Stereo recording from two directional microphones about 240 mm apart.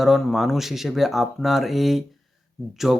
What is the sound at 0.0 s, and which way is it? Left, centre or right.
Speech, centre.